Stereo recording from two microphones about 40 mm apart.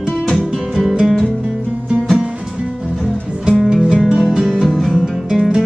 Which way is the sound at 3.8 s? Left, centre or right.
Centre.